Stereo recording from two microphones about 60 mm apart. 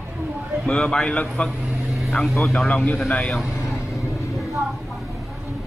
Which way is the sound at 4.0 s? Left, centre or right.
Left.